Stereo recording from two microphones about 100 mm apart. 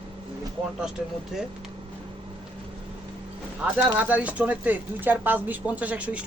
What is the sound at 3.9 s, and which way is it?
Speech, 15° right (ahead or behind).